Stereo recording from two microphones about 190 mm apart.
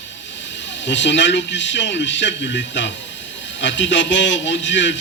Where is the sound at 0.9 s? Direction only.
70° left (ahead or behind).